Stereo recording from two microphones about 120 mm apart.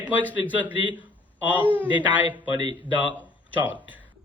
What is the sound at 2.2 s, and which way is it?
Speech, 35° right (ahead or behind).